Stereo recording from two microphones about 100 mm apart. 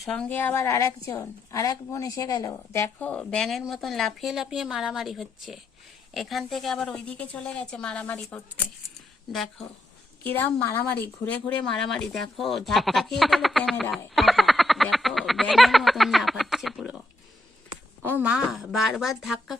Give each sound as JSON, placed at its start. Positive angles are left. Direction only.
{"t": 0.0, "sound": "a woman's voice", "side_deg": 5}
{"t": 0.3, "sound": "a woman's voice", "side_deg": 20}
{"t": 3.0, "sound": "speech", "side_deg": 10}
{"t": 6.8, "sound": "a woman's voice", "side_deg": 10}
{"t": 9.3, "sound": "speech", "side_deg": 5}
{"t": 10.2, "sound": "speech", "side_deg": 20}
{"t": 18.0, "sound": "speech", "side_deg": -20}
{"t": 18.3, "sound": "speech", "side_deg": -10}